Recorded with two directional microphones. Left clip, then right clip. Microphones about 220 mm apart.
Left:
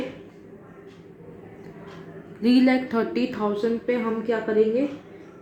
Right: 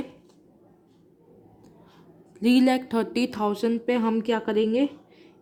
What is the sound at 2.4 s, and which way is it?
Speech, 40° right (ahead or behind).